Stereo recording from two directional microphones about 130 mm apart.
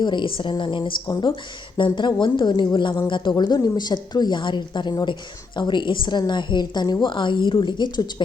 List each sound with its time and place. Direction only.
0.0 s a woman's voice: 35° left (ahead or behind)